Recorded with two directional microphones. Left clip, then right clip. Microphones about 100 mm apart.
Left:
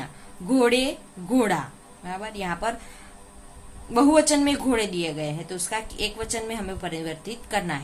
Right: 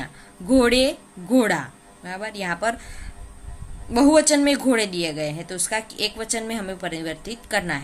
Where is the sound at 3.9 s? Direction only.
40° right (ahead or behind).